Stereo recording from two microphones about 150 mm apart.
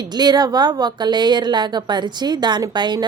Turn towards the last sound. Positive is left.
turn(degrees=-30)  # may be behind; listen again after turning